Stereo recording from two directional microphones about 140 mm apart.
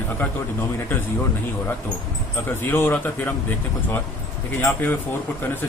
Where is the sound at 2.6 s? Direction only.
15° left (ahead or behind).